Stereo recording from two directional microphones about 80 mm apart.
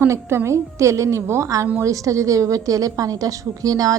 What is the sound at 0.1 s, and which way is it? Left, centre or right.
A woman's voice, right.